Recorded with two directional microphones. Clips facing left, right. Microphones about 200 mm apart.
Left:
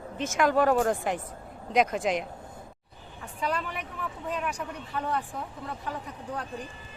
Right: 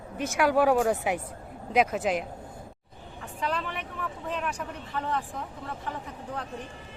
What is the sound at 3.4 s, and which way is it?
Speech, 10° left (ahead or behind).